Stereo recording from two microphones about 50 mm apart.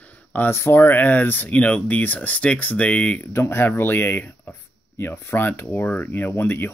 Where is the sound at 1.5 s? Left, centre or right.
Left.